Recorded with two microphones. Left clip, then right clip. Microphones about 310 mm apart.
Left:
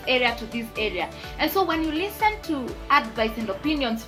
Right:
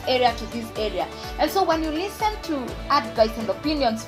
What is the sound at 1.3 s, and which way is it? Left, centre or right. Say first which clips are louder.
Speech: right 2 dB; centre.